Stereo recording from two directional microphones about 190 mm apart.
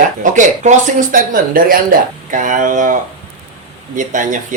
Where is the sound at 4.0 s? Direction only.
40° right (ahead or behind).